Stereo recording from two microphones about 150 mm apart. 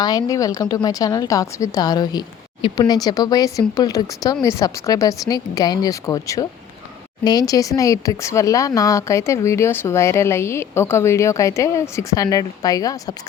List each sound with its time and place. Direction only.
0.0 s speech: 25° left (ahead or behind)